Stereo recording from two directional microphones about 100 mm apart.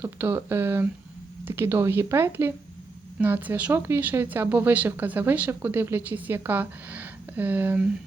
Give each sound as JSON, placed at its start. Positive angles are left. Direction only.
{"t": 0.0, "sound": "speech", "side_deg": -20}